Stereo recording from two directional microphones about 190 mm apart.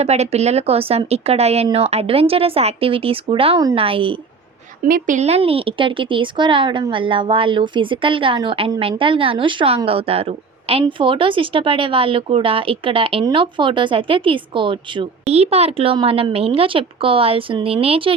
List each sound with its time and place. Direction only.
0.0 s speech: 35° right (ahead or behind)
4.8 s speech: 45° right (ahead or behind); by 18.1 s 30° right (ahead or behind)